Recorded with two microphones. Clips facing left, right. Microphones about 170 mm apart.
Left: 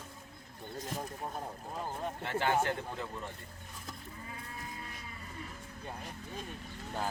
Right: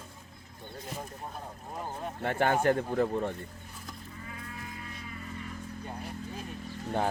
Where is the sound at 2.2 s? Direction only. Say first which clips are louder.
Right 4 dB; 55° right (ahead or behind).